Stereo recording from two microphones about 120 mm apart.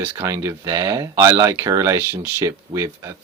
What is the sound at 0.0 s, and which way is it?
Speech, 25° right (ahead or behind).